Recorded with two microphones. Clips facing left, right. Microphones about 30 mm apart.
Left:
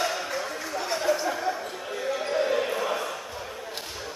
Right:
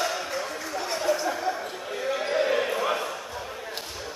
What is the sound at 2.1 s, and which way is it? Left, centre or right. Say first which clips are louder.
Basketball bounce: right 1 dB; centre.